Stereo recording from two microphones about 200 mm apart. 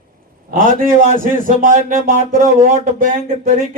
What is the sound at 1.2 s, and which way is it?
Speech, 45° right (ahead or behind).